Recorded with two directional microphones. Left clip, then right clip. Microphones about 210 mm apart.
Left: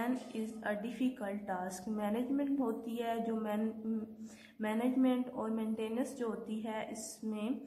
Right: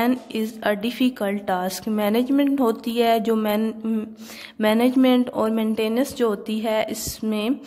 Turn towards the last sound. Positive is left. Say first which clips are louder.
# right 16 dB
turn(degrees=-45)  # may be behind; listen again after turning